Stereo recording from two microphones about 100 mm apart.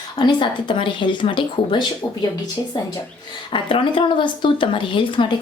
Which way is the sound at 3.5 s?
55° left (ahead or behind).